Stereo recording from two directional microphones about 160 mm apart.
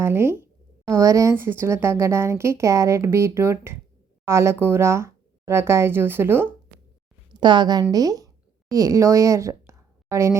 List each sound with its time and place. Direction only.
0.0 s speech: 15° right (ahead or behind)
7.3 s a woman's voice: 25° right (ahead or behind)